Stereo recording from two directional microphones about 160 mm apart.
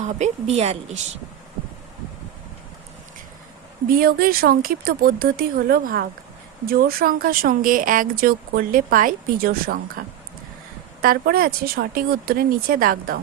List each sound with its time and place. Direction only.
0.0 s a woman's voice: 45° right (ahead or behind)
3.8 s speech: 65° right (ahead or behind)
11.0 s speech: 65° right (ahead or behind)